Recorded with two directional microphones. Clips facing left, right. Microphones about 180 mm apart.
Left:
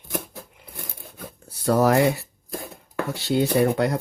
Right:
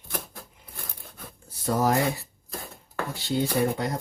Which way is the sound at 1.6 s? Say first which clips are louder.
Left 6 dB; 70° left (ahead or behind).